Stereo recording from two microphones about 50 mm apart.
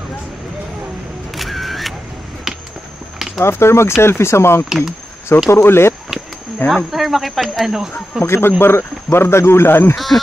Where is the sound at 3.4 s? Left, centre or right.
Left.